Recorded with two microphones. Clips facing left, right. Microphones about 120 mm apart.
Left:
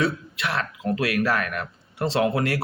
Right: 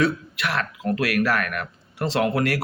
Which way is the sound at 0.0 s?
30° left (ahead or behind).